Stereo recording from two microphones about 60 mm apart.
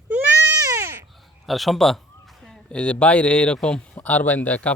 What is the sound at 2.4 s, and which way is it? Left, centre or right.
Speech, centre.